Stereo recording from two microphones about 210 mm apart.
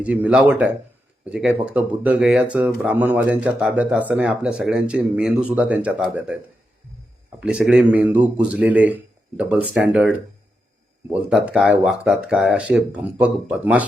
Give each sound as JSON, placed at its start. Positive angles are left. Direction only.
{"t": 0.0, "sound": "speech", "side_deg": -5}
{"t": 7.3, "sound": "speech", "side_deg": -5}